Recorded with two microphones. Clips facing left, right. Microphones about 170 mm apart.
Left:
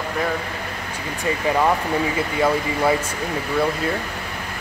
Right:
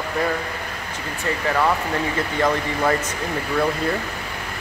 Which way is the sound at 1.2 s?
15° left (ahead or behind).